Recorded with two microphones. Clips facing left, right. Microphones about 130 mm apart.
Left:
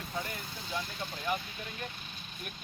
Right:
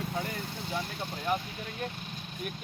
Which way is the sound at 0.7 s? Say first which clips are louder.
Right 1 dB; 30° right (ahead or behind).